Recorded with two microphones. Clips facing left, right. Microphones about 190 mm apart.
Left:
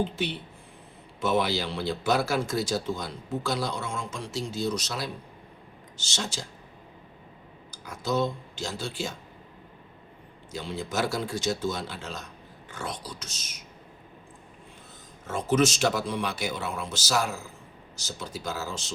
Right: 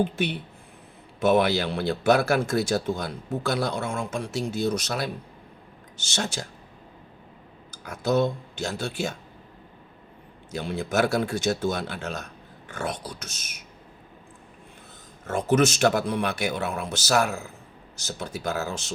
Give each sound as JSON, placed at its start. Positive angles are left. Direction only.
{"t": 0.0, "sound": "speech", "side_deg": -55}
{"t": 7.7, "sound": "speech", "side_deg": -60}
{"t": 10.5, "sound": "speech", "side_deg": -60}
{"t": 15.3, "sound": "speech", "side_deg": -55}